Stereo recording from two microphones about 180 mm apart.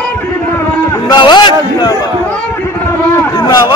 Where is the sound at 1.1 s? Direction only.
25° left (ahead or behind).